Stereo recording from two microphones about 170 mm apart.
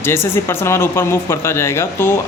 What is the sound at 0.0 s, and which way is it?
Speech, 15° left (ahead or behind).